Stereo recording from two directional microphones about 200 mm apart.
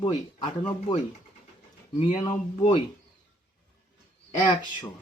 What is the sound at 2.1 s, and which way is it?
Speech, 25° left (ahead or behind).